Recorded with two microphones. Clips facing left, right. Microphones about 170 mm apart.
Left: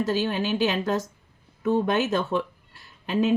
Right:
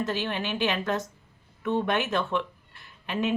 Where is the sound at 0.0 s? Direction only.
35° left (ahead or behind).